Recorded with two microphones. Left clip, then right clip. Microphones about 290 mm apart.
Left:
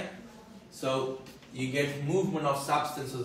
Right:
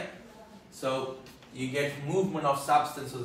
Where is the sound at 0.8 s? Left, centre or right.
Centre.